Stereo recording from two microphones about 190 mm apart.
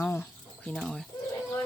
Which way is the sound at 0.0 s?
10° left (ahead or behind).